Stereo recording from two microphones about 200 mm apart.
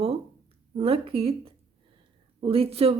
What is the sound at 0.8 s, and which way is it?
A woman's voice, 30° right (ahead or behind).